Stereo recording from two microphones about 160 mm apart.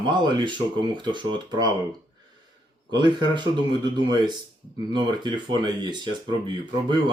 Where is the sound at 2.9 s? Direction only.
25° right (ahead or behind).